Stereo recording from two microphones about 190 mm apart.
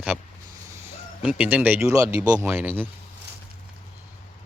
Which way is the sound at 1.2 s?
5° right (ahead or behind).